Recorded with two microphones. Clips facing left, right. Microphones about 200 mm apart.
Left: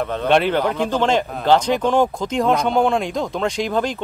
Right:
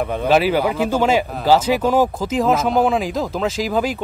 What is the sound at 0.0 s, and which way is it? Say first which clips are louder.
Speech: right 1 dB; 10° right (ahead or behind).